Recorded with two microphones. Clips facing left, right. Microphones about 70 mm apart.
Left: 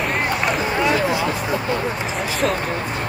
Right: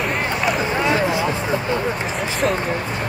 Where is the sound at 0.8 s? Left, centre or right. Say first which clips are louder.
Left 1 dB; right.